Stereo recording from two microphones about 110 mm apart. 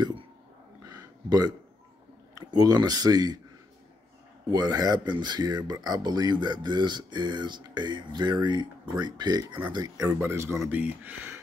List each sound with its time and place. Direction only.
0.8 s a sound: 35° right (ahead or behind)
2.4 s speech: 35° right (ahead or behind)
4.5 s speech: 40° right (ahead or behind)
10.0 s speech: 20° right (ahead or behind)